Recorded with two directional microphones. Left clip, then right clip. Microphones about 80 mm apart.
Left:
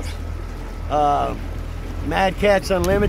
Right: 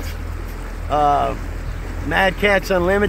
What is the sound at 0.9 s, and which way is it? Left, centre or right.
Speech, right.